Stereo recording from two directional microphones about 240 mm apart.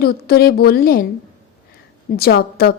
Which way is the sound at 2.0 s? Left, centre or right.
Left.